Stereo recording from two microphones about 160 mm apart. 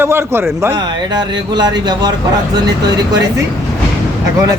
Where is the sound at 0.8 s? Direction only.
25° right (ahead or behind).